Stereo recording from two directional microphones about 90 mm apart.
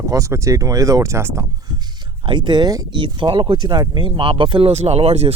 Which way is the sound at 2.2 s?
60° right (ahead or behind).